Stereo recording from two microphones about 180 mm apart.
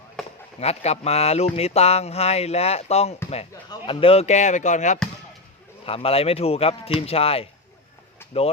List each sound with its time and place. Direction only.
0.6 s speech: 35° left (ahead or behind)
8.2 s vehicle: 15° left (ahead or behind)